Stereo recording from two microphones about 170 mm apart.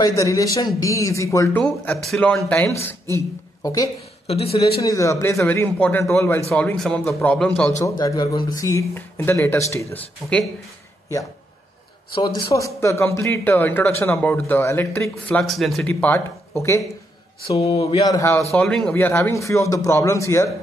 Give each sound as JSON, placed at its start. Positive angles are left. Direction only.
{"t": 0.0, "sound": "a man's voice", "side_deg": 20}
{"t": 1.6, "sound": "speech", "side_deg": 5}
{"t": 4.3, "sound": "speech", "side_deg": 35}
{"t": 4.8, "sound": "speech", "side_deg": 20}
{"t": 7.8, "sound": "speech", "side_deg": 20}
{"t": 12.4, "sound": "speech", "side_deg": 20}
{"t": 15.9, "sound": "speech", "side_deg": 15}
{"t": 17.5, "sound": "speech", "side_deg": 35}
{"t": 18.0, "sound": "a man's voice", "side_deg": 20}
{"t": 18.5, "sound": "speech", "side_deg": 5}